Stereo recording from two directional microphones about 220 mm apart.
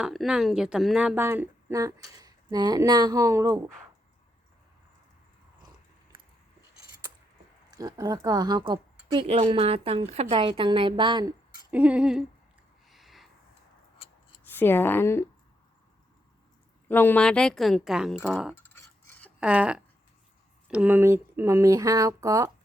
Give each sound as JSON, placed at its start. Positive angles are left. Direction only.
{"t": 0.0, "sound": "speech", "side_deg": 0}
{"t": 6.1, "sound": "biting", "side_deg": -25}
{"t": 7.7, "sound": "speech", "side_deg": -15}
{"t": 11.7, "sound": "a woman's voice", "side_deg": -5}
{"t": 12.9, "sound": "a sound", "side_deg": 0}
{"t": 14.4, "sound": "speech", "side_deg": 10}
{"t": 16.9, "sound": "a woman's voice", "side_deg": 10}
{"t": 18.5, "sound": "cutlery", "side_deg": 10}
{"t": 19.4, "sound": "a woman's voice", "side_deg": -5}